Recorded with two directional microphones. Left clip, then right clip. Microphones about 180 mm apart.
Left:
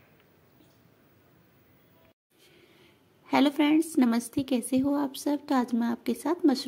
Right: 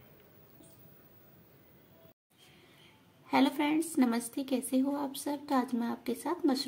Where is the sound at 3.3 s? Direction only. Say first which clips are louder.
Left 5 dB; 30° left (ahead or behind).